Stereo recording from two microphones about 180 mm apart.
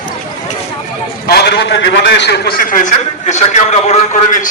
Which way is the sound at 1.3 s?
65° left (ahead or behind).